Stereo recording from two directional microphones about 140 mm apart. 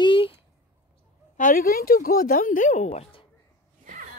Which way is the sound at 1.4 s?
80° left.